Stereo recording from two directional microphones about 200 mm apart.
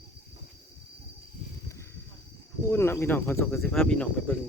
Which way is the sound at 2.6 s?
10° left (ahead or behind).